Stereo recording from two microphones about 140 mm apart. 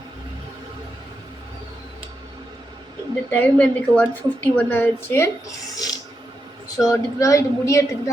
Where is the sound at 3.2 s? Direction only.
15° left (ahead or behind).